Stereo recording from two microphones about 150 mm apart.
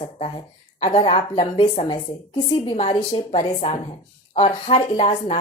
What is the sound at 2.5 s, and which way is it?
A woman's voice, 45° left (ahead or behind).